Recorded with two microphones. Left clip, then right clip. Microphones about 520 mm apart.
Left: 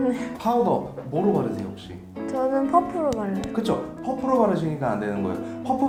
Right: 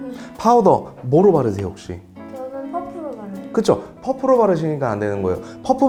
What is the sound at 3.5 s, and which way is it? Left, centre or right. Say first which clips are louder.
Speech: right 12 dB; right.